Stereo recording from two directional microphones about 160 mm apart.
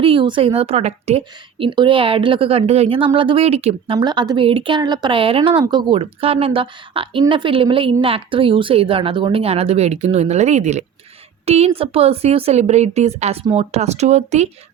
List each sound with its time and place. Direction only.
0.0 s a woman's voice: 35° right (ahead or behind)